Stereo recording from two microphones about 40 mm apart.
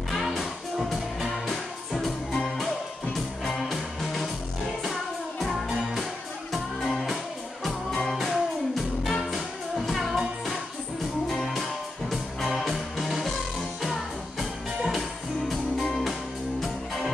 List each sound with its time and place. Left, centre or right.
0.1 s music: centre
6.8 s music: centre
8.0 s music: centre
14.9 s music: centre